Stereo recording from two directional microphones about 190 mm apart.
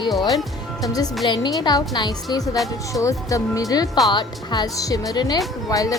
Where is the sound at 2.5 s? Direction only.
Centre (ahead or behind).